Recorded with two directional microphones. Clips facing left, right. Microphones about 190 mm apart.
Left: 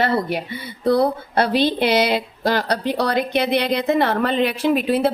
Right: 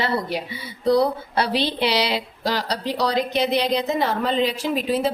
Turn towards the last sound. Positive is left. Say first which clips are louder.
# left 4 dB
turn(degrees=60)  # may be behind; listen again after turning